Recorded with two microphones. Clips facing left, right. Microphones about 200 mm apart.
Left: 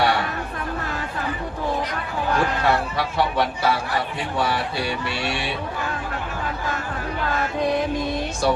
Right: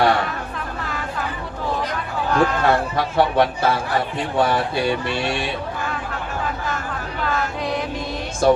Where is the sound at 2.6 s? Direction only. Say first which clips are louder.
Right 3 dB; 50° right (ahead or behind).